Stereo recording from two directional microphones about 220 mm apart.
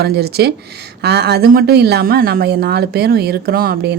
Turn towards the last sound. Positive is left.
turn(degrees=-45)  # may be behind; listen again after turning